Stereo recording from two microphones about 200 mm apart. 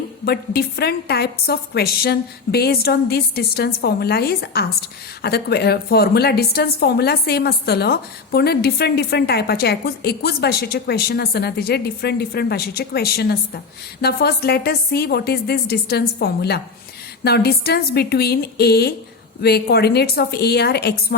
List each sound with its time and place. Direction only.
0.3 s a woman's voice: 50° left (ahead or behind)